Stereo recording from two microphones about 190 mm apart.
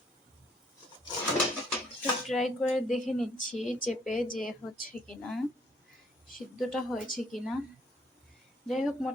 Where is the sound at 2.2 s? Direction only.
Centre (ahead or behind).